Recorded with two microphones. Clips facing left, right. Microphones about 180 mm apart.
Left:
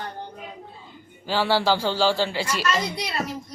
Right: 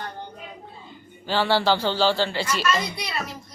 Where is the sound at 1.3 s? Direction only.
5° left (ahead or behind).